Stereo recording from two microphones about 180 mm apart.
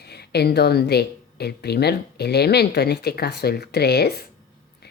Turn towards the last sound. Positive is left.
turn(degrees=60)  # may be behind; listen again after turning